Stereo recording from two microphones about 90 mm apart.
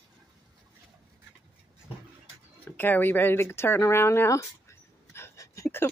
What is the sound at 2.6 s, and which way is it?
A woman's voice, 20° left (ahead or behind).